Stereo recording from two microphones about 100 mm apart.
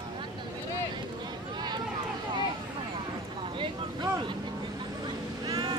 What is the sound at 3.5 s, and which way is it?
Vehicle, 55° right (ahead or behind).